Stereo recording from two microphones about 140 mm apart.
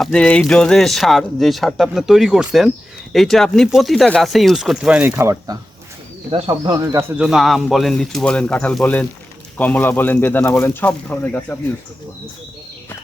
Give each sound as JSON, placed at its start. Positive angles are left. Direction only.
{"t": 0.0, "sound": "speech", "side_deg": 5}
{"t": 7.2, "sound": "speech", "side_deg": -5}